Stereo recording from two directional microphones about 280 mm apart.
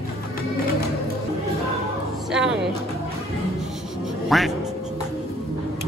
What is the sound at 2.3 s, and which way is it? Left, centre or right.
Music, centre.